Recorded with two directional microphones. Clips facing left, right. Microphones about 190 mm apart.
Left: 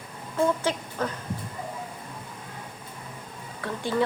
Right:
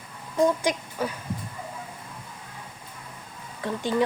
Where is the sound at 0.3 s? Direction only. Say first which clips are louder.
Right 2 dB; 15° right (ahead or behind).